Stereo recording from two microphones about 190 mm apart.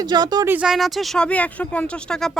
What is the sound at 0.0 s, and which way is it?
Speech, 20° right (ahead or behind).